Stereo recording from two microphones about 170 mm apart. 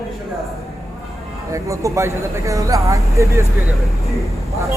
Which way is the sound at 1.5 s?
20° right (ahead or behind).